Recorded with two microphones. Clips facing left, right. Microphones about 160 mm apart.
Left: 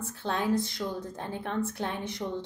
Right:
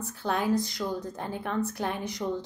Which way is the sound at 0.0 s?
25° left (ahead or behind).